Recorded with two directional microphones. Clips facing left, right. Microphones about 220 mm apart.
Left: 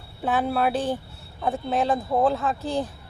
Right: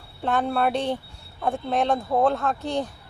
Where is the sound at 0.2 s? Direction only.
5° left (ahead or behind).